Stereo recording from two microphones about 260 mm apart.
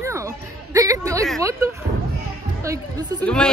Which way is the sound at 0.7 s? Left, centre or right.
Centre.